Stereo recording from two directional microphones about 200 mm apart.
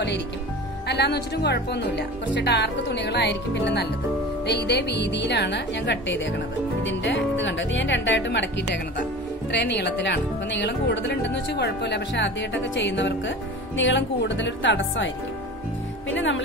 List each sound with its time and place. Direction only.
0.8 s speech: 55° left (ahead or behind)
16.1 s speech: 70° left (ahead or behind)